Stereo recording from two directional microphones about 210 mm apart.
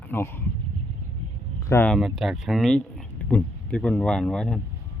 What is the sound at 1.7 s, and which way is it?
Speech, 10° left (ahead or behind).